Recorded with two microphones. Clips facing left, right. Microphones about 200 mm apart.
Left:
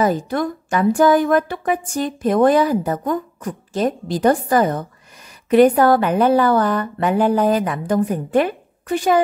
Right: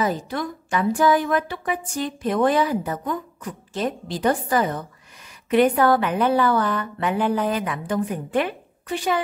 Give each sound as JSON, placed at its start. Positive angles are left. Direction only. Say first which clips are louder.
{"t": 0.0, "sound": "a woman's voice", "louder": "left 6 dB", "side_deg": 50}